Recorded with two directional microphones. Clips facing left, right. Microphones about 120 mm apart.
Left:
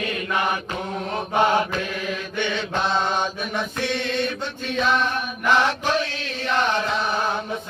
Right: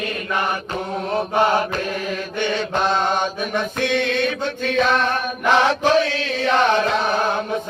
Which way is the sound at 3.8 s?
60° right (ahead or behind).